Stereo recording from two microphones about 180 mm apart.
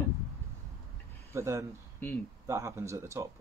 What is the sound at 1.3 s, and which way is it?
Speech, 15° right (ahead or behind).